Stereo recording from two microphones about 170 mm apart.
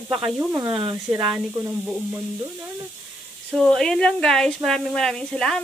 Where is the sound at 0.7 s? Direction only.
30° right (ahead or behind).